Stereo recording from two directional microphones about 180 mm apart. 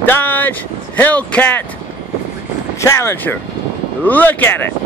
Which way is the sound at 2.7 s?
15° left (ahead or behind).